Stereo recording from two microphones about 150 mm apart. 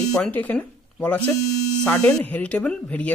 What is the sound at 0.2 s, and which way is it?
Speech, 10° left (ahead or behind).